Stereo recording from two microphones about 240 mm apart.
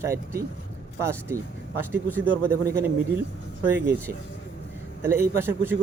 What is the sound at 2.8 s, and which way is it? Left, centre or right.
Speech, centre.